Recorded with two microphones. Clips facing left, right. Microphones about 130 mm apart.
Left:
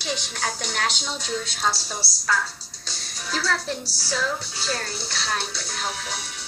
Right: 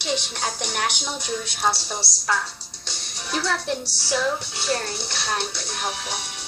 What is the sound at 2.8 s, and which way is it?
Music, 20° right (ahead or behind).